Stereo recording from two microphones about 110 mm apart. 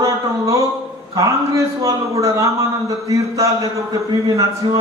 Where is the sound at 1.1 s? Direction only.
30° right (ahead or behind).